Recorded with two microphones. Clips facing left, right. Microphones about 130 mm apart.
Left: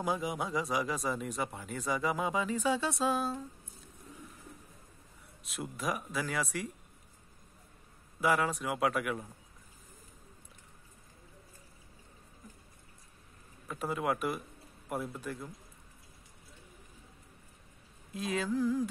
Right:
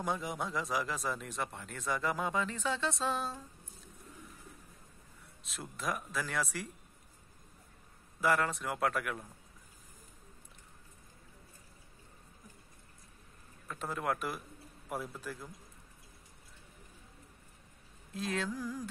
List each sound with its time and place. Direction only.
0.0 s speech: 5° left (ahead or behind)
5.4 s speech: centre (ahead or behind)
8.2 s speech: centre (ahead or behind)
13.7 s speech: 5° left (ahead or behind)
18.1 s speech: centre (ahead or behind)